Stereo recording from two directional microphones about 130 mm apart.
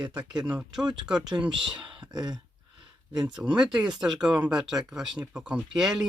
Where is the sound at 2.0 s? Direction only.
30° right (ahead or behind).